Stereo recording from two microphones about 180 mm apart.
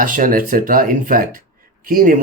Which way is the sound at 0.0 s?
50° right (ahead or behind).